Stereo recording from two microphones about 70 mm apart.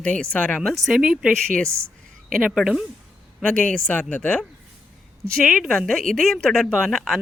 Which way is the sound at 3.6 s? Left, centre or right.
Centre.